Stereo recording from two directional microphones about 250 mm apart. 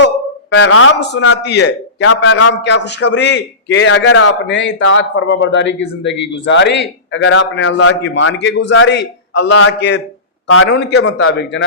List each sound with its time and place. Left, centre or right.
0.5 s a man's voice: left